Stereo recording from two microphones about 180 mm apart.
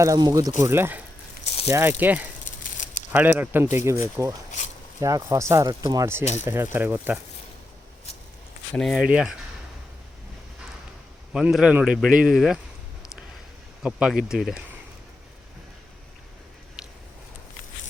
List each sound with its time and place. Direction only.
0.0 s speech: 20° right (ahead or behind)
2.4 s a sound: 45° left (ahead or behind)
3.1 s speech: 10° right (ahead or behind)
8.7 s speech: centre (ahead or behind)
11.3 s speech: 5° right (ahead or behind)
13.8 s speech: 5° right (ahead or behind)
16.8 s a sound: centre (ahead or behind)